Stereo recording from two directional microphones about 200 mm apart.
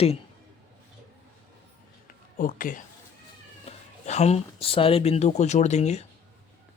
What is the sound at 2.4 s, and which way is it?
Speech, 45° left (ahead or behind).